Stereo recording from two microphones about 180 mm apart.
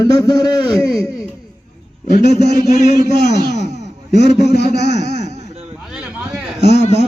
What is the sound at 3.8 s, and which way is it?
A man's voice, 70° left (ahead or behind).